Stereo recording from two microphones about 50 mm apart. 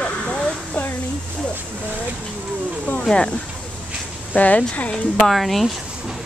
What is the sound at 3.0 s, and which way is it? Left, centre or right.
Speech, centre.